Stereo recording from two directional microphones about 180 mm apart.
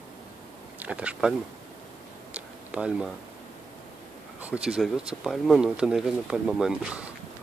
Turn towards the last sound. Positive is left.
turn(degrees=-5)  # may be behind; listen again after turning